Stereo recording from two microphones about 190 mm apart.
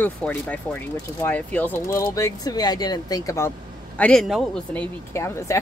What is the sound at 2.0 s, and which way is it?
Speech, 20° left (ahead or behind).